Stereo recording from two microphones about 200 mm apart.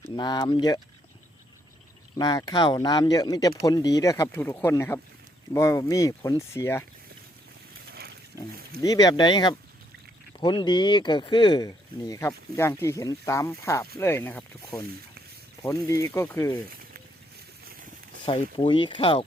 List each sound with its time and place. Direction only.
0.2 s speech: 20° left (ahead or behind)
2.1 s speech: 20° left (ahead or behind)
7.9 s roaring cats: 50° right (ahead or behind)
8.3 s speech: 15° right (ahead or behind)
8.8 s speech: 20° left (ahead or behind)
18.3 s speech: 25° left (ahead or behind)